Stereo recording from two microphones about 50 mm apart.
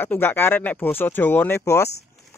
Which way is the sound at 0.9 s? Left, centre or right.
Left.